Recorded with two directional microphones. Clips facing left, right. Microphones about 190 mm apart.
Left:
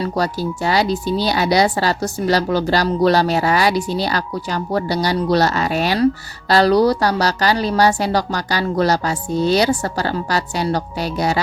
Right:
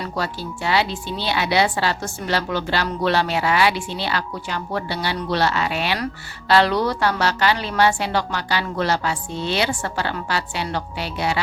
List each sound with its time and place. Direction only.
0.0 s speech: 40° left (ahead or behind)